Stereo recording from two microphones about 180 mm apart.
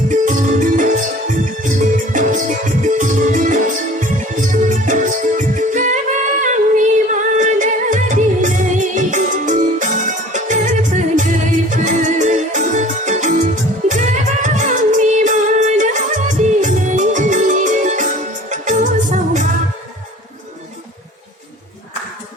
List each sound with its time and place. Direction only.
0.1 s music: 45° right (ahead or behind)